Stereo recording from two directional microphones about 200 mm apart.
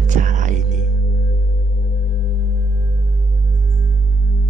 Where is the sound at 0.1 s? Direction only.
40° right (ahead or behind).